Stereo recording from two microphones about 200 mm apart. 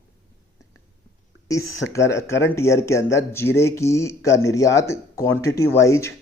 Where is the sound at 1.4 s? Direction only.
15° left (ahead or behind).